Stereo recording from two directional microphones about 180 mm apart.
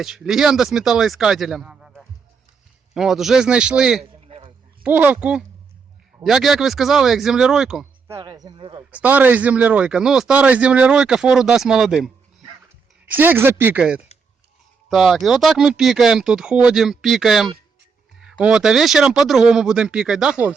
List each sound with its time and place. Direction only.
0.0 s a man's voice: centre (ahead or behind)
4.3 s a sound: 35° right (ahead or behind)
4.8 s a man's voice: 10° right (ahead or behind)
8.0 s speech: 20° right (ahead or behind)
8.9 s a man's voice: 10° right (ahead or behind)